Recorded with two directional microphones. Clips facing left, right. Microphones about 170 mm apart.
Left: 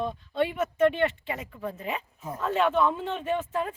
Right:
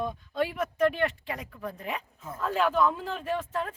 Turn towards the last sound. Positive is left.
turn(degrees=5)  # may be behind; listen again after turning